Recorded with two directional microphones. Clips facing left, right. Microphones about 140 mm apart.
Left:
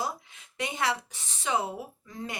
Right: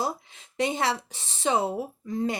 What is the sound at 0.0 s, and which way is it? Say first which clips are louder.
Speech: right 4 dB; 30° right (ahead or behind).